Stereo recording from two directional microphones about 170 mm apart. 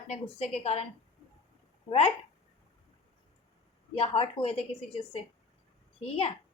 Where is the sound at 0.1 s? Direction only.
40° left (ahead or behind).